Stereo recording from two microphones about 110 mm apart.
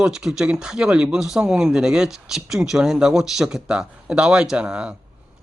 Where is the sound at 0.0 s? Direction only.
5° right (ahead or behind).